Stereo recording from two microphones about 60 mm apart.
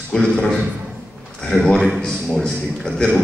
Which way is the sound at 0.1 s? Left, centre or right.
Centre.